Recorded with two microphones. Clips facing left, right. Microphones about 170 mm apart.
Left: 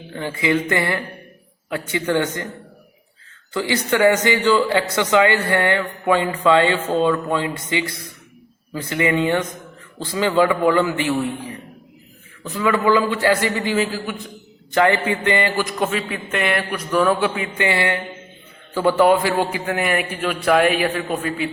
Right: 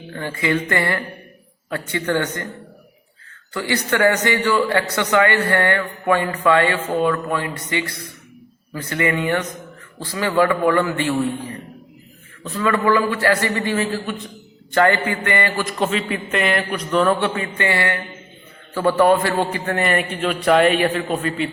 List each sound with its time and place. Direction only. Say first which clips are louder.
0.1 s a man's voice: left 1 dB; 15° left (ahead or behind)
3.5 s a man's voice: left 1 dB; 20° left (ahead or behind)
12.4 s a man's voice: even; 15° left (ahead or behind)
15.8 s a man's voice: right 1 dB; centre (ahead or behind)